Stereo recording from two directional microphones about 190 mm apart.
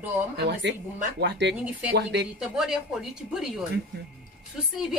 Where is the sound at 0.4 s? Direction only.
65° right (ahead or behind).